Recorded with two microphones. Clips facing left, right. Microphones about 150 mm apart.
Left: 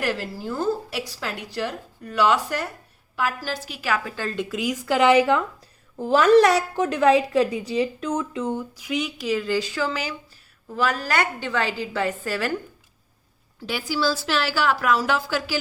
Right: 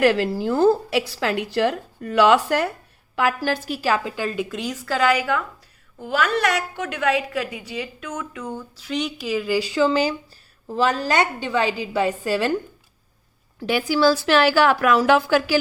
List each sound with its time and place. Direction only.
0.0 s a woman's voice: 80° right
3.7 s a woman's voice: 35° right (ahead or behind)
4.0 s speech: 15° right (ahead or behind)
4.4 s a woman's voice: 5° left (ahead or behind); by 9.8 s 10° right (ahead or behind)
9.8 s a woman's voice: 30° right (ahead or behind)
13.6 s a woman's voice: 55° right (ahead or behind)